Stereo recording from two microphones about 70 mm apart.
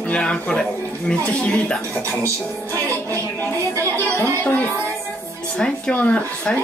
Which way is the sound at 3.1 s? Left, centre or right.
Left.